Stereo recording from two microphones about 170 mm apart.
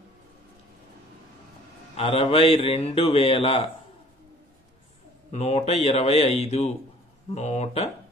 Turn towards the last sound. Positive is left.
turn(degrees=40)  # may be behind; listen again after turning